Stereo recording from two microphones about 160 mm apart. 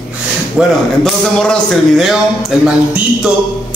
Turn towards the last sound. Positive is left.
turn(degrees=-5)  # may be behind; listen again after turning